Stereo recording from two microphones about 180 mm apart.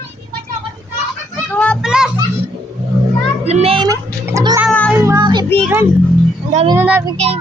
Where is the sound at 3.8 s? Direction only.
20° right (ahead or behind).